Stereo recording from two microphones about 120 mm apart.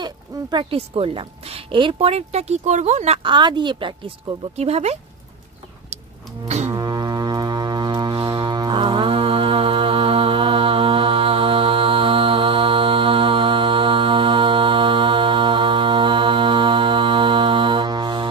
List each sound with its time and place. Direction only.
0.0 s speech: 40° right (ahead or behind)
0.7 s speech: 50° right (ahead or behind); by 3.2 s 70° right (ahead or behind)
3.2 s speech: 40° right (ahead or behind)
4.6 s speech: 60° right (ahead or behind)
6.4 s speech: 65° right (ahead or behind)
6.7 s foghorn: 30° right (ahead or behind)